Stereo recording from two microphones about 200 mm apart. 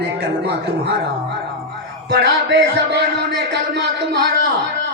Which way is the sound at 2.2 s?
60° right (ahead or behind).